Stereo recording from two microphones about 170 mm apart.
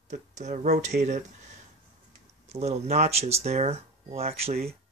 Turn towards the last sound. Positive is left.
turn(degrees=-35)  # may be behind; listen again after turning